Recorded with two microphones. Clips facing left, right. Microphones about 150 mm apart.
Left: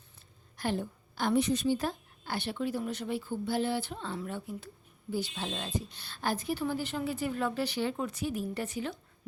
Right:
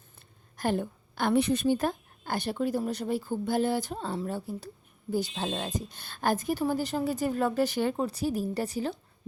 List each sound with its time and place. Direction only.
0.5 s a woman's voice: 45° right (ahead or behind)
8.0 s a woman's voice: 35° right (ahead or behind)